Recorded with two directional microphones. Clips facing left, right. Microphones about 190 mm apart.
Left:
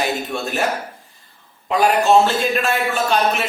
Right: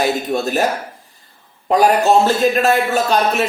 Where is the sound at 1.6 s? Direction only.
40° right (ahead or behind).